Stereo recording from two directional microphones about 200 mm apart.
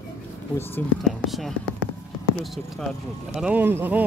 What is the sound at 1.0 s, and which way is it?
Speech, centre (ahead or behind).